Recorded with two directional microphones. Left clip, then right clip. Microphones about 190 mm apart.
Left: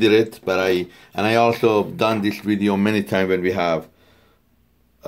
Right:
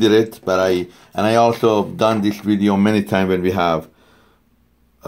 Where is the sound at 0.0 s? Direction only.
25° right (ahead or behind).